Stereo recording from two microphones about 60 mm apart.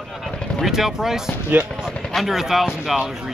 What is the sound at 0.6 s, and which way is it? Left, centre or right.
Speech, centre.